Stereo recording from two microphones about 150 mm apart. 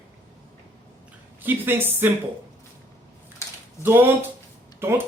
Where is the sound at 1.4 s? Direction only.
15° right (ahead or behind).